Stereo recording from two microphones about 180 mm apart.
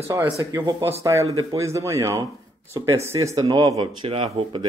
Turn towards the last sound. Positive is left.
turn(degrees=-25)  # may be behind; listen again after turning